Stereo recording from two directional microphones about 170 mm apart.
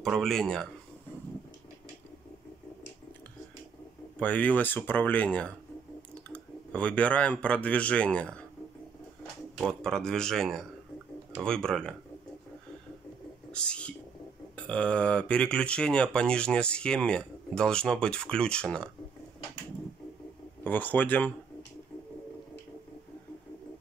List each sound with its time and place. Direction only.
0.0 s speech: centre (ahead or behind)
4.2 s speech: 10° left (ahead or behind)
9.6 s speech: 5° left (ahead or behind)
13.5 s a sound: 5° left (ahead or behind)
14.6 s speech: 5° left (ahead or behind)
20.6 s speech: 10° left (ahead or behind)